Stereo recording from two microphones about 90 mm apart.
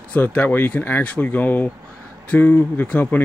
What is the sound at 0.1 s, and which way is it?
Speech, 15° left (ahead or behind).